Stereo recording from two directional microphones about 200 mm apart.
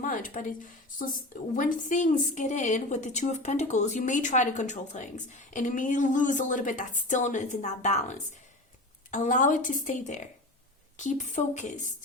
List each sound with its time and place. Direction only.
0.0 s a woman's voice: 40° left (ahead or behind)